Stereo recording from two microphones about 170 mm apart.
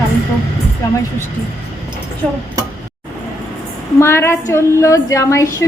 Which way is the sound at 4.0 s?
15° left (ahead or behind).